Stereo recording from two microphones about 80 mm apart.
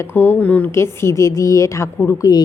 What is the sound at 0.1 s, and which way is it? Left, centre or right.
Speech, left.